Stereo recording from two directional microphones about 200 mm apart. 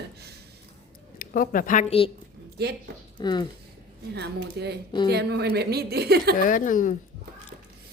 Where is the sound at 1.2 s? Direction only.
45° left (ahead or behind).